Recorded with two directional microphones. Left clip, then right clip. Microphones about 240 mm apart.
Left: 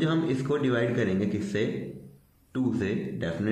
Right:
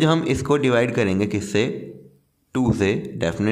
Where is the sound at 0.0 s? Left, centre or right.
Right.